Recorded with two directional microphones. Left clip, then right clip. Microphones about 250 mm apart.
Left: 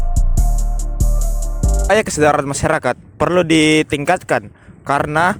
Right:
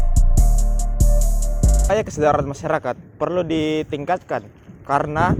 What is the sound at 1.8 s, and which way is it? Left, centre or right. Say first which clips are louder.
Speech: left 5 dB; left.